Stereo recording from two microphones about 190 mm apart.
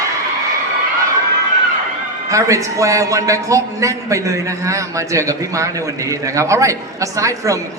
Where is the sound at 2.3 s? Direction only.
15° right (ahead or behind).